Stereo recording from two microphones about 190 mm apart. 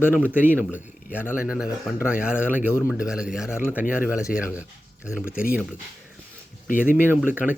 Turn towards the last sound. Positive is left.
turn(degrees=-10)  # may be behind; listen again after turning